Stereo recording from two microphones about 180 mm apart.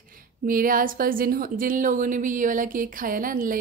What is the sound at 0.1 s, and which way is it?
A woman's voice, 50° right (ahead or behind).